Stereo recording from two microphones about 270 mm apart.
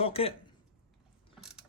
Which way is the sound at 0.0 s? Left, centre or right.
Left.